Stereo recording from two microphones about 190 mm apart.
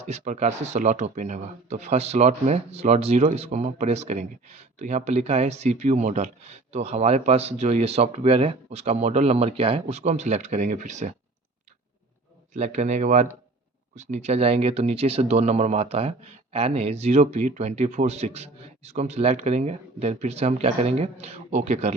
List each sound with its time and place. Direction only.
0.0 s speech: 35° right (ahead or behind)
12.5 s speech: 35° right (ahead or behind)